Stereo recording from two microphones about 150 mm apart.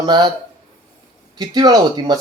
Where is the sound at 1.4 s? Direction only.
25° right (ahead or behind).